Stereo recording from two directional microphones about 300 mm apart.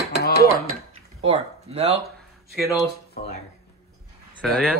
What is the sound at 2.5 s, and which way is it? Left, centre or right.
Speech, centre.